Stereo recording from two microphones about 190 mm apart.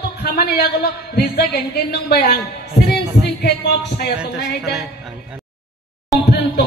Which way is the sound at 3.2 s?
60° left (ahead or behind).